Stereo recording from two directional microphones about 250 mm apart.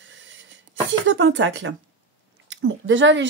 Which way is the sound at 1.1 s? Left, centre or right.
Right.